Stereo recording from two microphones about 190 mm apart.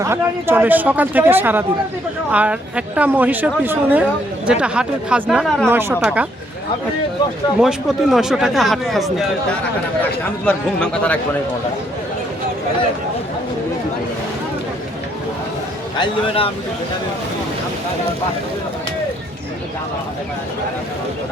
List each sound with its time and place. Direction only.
0.0 s speech: 15° right (ahead or behind)
7.6 s speech: centre (ahead or behind)
10.4 s speech: 5° left (ahead or behind)
16.0 s speech: 30° left (ahead or behind)